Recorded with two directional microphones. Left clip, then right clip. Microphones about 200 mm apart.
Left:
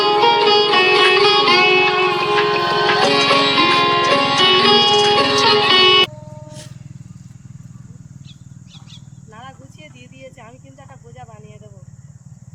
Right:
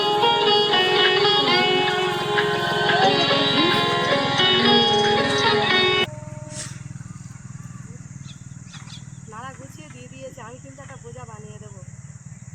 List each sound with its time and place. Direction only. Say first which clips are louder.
0.0 s music: left 5 dB; 20° left (ahead or behind)